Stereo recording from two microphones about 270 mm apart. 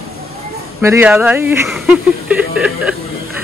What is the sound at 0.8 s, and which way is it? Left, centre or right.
A man's voice, centre.